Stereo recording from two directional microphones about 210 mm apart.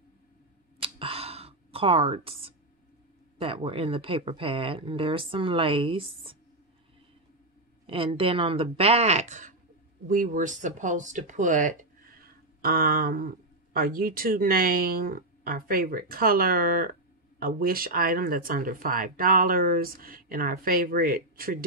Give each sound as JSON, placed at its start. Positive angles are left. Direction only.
{"t": 0.8, "sound": "gasp", "side_deg": -25}
{"t": 3.3, "sound": "speech", "side_deg": -25}
{"t": 7.8, "sound": "speech", "side_deg": -25}